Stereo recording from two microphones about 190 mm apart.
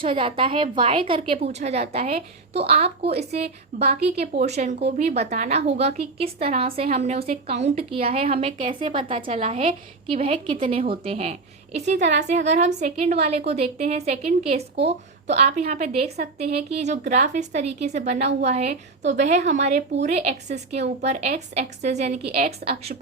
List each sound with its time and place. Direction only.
0.0 s a woman's voice: 30° right (ahead or behind)